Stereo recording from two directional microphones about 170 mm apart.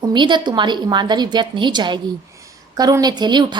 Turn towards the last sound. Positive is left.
turn(degrees=-25)  # may be behind; listen again after turning